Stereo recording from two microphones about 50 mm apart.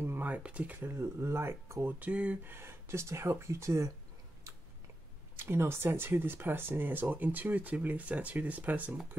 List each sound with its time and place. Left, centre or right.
0.0 s a sound: right
0.4 s speech: right
0.7 s speech: right
1.9 s speech: right
2.4 s speech: right
5.3 s speech: right